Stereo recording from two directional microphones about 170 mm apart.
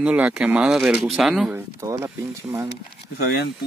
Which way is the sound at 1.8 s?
20° right (ahead or behind).